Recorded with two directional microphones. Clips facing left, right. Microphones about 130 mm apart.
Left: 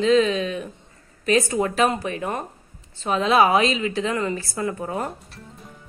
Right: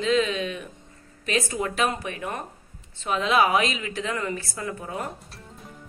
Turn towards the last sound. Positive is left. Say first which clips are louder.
# left 6 dB
turn(degrees=35)  # may be behind; listen again after turning